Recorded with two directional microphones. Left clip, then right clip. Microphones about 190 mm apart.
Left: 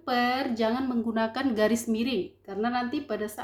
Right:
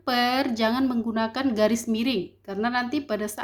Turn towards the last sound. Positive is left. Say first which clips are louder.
# right 3 dB
turn(degrees=-35)  # may be behind; listen again after turning